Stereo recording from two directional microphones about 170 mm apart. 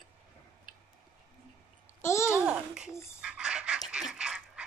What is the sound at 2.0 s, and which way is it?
Babbling, 15° left (ahead or behind).